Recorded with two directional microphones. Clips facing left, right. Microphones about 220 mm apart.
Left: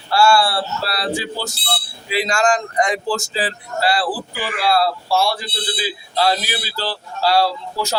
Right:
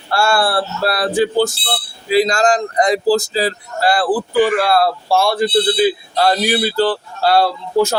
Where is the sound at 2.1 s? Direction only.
40° right (ahead or behind).